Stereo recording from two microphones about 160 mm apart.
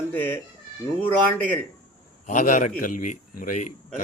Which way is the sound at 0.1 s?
10° left (ahead or behind).